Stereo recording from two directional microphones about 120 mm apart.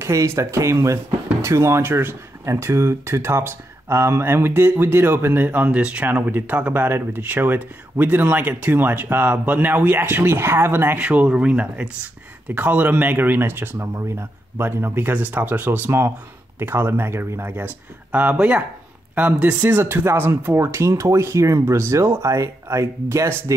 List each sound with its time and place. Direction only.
0.0 s speech: 25° right (ahead or behind)